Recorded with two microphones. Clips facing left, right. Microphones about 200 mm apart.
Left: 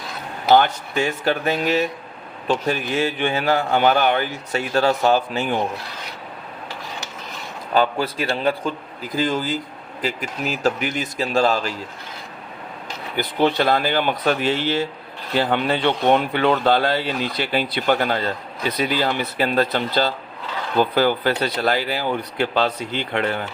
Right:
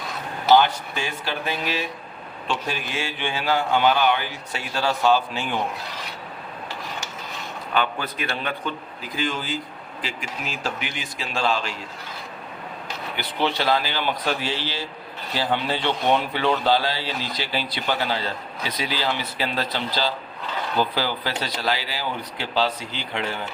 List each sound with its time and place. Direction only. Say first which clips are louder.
1.2 s a man's voice: left 6 dB; 50° left (ahead or behind)
7.7 s speech: left 6 dB; 35° left (ahead or behind)
13.1 s a man's voice: left 6 dB; 50° left (ahead or behind)